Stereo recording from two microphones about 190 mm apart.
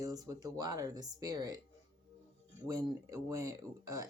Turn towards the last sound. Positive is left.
turn(degrees=-20)  # may be behind; listen again after turning